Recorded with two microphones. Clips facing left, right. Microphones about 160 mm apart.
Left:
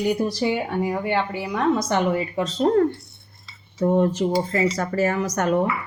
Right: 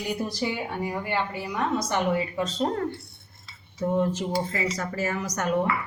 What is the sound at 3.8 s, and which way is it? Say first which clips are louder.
Speech: left 6 dB; 55° left (ahead or behind).